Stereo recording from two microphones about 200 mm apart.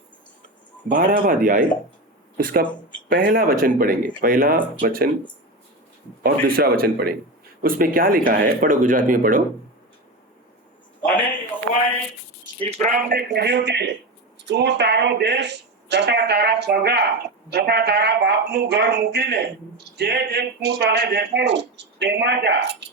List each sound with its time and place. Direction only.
0.9 s speech: 45° right (ahead or behind)
6.2 s speech: 50° right (ahead or behind)
12.5 s speech: 30° right (ahead or behind); by 22.7 s 60° right (ahead or behind)